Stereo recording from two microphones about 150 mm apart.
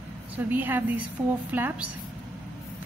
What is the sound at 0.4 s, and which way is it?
A woman's voice, 10° right (ahead or behind).